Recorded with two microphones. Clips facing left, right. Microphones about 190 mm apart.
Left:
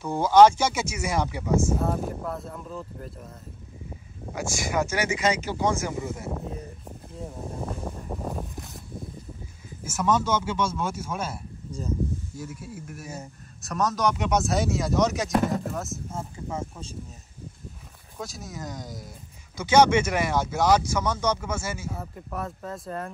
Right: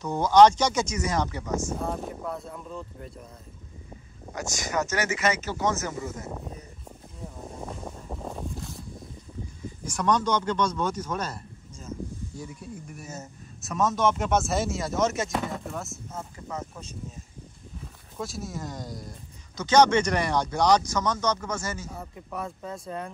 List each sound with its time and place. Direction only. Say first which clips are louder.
0.0 s speech: left 1 dB; 10° left (ahead or behind)
4.3 s speech: left 3 dB; 10° left (ahead or behind)
7.5 s a sound: left 4 dB; centre (ahead or behind)
9.8 s speech: left 1 dB; 5° left (ahead or behind)
13.6 s speech: right 1 dB; centre (ahead or behind)
16.1 s speech: left 3 dB; 25° left (ahead or behind)
18.1 s speech: right 3 dB; centre (ahead or behind)